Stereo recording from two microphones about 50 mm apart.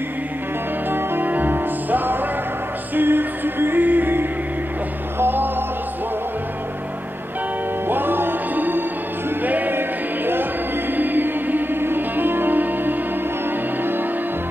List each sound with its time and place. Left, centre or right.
0.8 s music: right
7.9 s music: right